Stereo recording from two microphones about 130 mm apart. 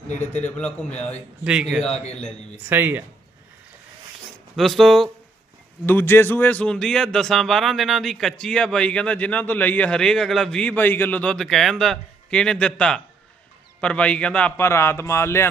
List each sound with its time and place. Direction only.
0.4 s speech: 10° left (ahead or behind)
2.6 s speech: 15° right (ahead or behind)
4.5 s speech: centre (ahead or behind)
5.8 s a man's voice: 15° left (ahead or behind)